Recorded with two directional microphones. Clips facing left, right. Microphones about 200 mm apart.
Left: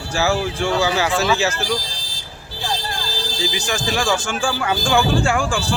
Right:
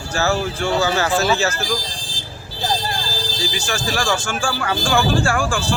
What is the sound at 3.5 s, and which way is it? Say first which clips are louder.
Speech: left 1 dB; 20° left (ahead or behind).